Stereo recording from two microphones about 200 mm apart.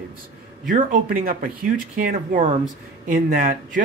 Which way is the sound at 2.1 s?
35° right (ahead or behind).